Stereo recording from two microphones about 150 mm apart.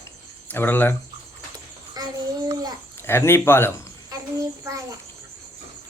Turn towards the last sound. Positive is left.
turn(degrees=-20)  # may be behind; listen again after turning